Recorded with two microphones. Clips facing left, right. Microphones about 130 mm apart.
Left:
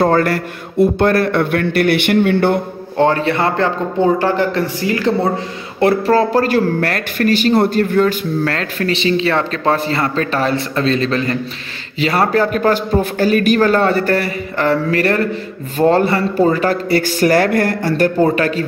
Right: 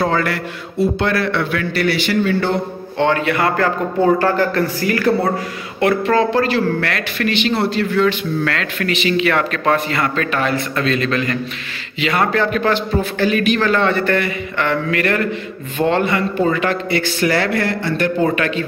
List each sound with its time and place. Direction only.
0.0 s speech: 45° left (ahead or behind)
3.0 s a man's voice: 35° left (ahead or behind)
5.8 s speech: 35° left (ahead or behind)